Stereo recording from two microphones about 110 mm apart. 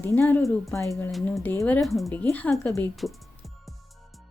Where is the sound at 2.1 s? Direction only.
15° left (ahead or behind).